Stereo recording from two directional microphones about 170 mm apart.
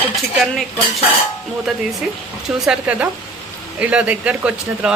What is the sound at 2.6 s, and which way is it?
Speech, 5° right (ahead or behind).